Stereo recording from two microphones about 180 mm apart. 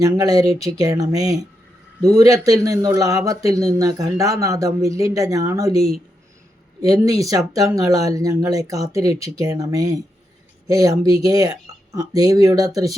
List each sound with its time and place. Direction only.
0.0 s a woman's voice: 20° right (ahead or behind)
6.8 s speech: 20° right (ahead or behind)